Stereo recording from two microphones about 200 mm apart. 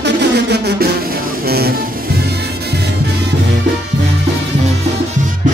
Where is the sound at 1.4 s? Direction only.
50° right (ahead or behind).